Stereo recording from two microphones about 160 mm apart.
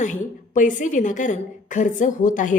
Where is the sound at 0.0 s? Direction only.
50° left (ahead or behind).